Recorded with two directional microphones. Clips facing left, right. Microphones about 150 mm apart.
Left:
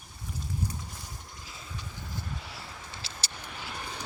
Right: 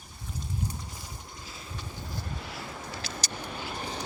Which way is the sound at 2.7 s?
50° right (ahead or behind).